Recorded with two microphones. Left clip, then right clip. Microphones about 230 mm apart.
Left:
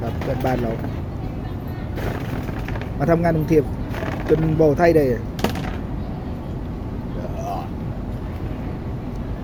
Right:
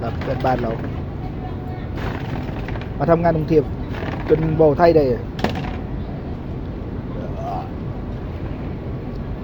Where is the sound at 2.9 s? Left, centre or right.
Centre.